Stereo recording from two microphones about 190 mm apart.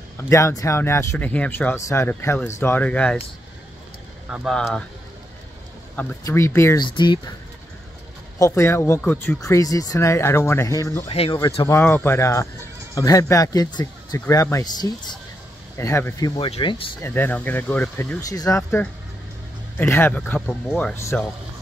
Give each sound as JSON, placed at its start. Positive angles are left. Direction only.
{"t": 0.2, "sound": "speech", "side_deg": 15}
{"t": 4.3, "sound": "speech", "side_deg": 0}
{"t": 5.9, "sound": "speech", "side_deg": 10}
{"t": 8.4, "sound": "speech", "side_deg": 15}
{"t": 11.1, "sound": "speech", "side_deg": 30}
{"t": 11.6, "sound": "speech", "side_deg": 10}
{"t": 16.3, "sound": "speech", "side_deg": 30}
{"t": 17.0, "sound": "speech", "side_deg": 10}
{"t": 18.3, "sound": "speech", "side_deg": 15}